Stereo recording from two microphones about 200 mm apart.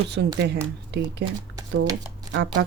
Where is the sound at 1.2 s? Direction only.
60° right (ahead or behind).